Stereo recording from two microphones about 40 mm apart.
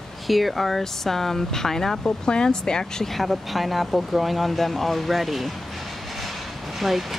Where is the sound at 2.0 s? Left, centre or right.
Left.